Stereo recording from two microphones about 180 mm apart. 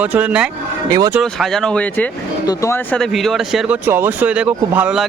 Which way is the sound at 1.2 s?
Centre (ahead or behind).